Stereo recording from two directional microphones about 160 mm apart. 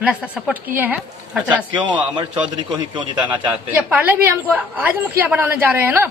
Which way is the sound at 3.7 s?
10° right (ahead or behind).